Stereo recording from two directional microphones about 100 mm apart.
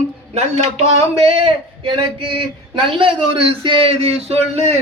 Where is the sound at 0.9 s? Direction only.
65° right (ahead or behind).